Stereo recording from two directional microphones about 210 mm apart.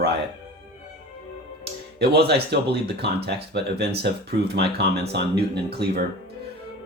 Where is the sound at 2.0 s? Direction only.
50° right (ahead or behind).